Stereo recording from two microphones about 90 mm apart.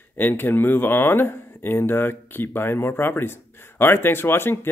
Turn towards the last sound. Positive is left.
turn(degrees=25)  # may be behind; listen again after turning